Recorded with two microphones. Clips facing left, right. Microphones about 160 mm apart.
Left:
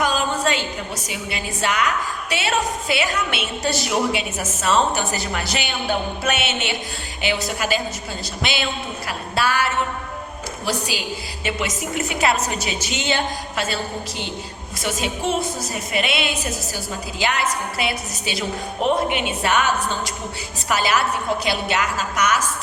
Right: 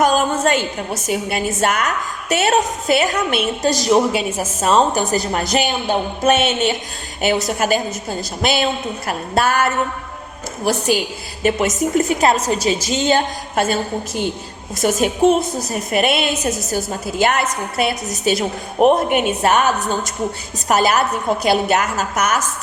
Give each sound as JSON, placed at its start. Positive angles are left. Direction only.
{"t": 0.0, "sound": "a sound", "side_deg": -50}
{"t": 1.0, "sound": "a woman's voice", "side_deg": -50}
{"t": 14.8, "sound": "a woman's voice", "side_deg": -45}